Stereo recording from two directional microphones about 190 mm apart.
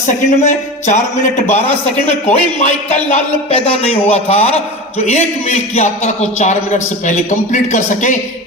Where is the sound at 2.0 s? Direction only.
35° left (ahead or behind).